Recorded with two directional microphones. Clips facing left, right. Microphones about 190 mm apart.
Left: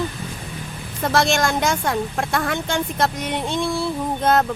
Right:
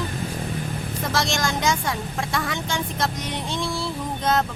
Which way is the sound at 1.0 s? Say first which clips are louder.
Left 6 dB; 55° left (ahead or behind).